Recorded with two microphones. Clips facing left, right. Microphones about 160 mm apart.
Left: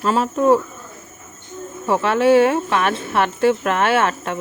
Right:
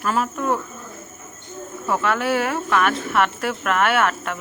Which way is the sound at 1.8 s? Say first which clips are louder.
Left 6 dB; 30° left (ahead or behind).